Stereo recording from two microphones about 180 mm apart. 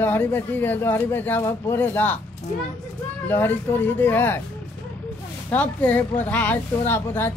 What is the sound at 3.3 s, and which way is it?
Speech, 10° left (ahead or behind).